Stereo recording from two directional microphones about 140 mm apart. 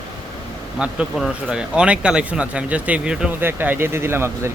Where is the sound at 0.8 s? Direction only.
5° right (ahead or behind).